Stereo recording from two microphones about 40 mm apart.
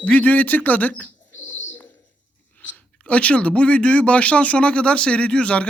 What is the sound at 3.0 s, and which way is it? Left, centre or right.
Speech, left.